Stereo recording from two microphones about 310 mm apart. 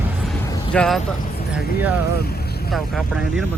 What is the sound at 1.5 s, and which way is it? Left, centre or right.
Speech, centre.